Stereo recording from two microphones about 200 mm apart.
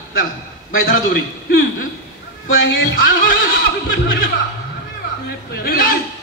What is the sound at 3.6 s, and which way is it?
Music, 65° left (ahead or behind).